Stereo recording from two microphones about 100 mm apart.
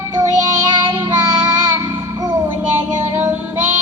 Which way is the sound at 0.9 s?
40° right (ahead or behind).